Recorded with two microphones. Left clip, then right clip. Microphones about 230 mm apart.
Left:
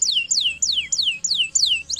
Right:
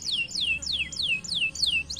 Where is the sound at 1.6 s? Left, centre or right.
Left.